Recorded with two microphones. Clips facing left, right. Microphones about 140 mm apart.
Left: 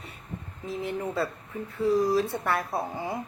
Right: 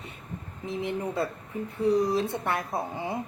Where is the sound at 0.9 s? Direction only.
20° right (ahead or behind).